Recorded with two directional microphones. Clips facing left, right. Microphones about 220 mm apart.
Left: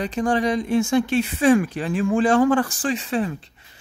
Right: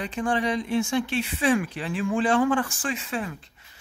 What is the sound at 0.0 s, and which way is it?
Speech, 40° left (ahead or behind).